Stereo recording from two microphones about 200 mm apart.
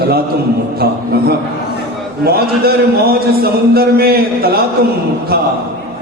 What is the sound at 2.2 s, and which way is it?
A man's voice, 50° right (ahead or behind).